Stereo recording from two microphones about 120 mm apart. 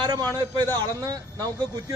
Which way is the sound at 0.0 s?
35° right (ahead or behind).